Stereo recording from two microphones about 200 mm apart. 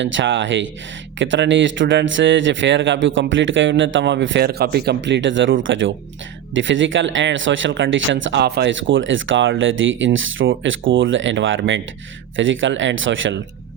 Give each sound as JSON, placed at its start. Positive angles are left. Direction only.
{"t": 0.0, "sound": "speech", "side_deg": -70}